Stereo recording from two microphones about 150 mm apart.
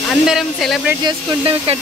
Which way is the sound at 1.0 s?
35° right (ahead or behind).